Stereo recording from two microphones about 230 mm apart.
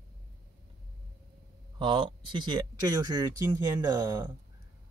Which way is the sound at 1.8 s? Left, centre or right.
Centre.